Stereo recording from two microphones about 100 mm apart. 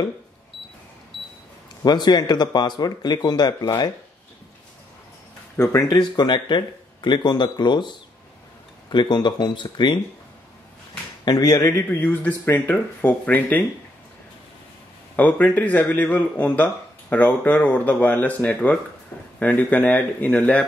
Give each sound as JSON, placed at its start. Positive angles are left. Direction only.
{"t": 1.9, "sound": "speech", "side_deg": 45}
{"t": 5.6, "sound": "speech", "side_deg": 30}
{"t": 5.9, "sound": "speech", "side_deg": 45}
{"t": 8.9, "sound": "speech", "side_deg": 50}
{"t": 11.2, "sound": "speech", "side_deg": 40}
{"t": 15.1, "sound": "speech", "side_deg": 15}